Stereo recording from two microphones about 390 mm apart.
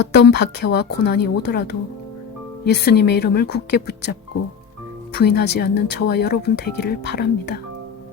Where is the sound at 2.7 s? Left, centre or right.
Left.